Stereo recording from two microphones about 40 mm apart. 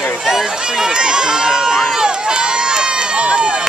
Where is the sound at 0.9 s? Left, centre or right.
Centre.